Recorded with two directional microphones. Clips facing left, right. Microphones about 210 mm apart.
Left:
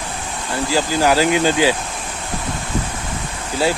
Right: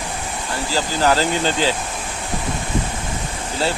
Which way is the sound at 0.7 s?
15° left (ahead or behind).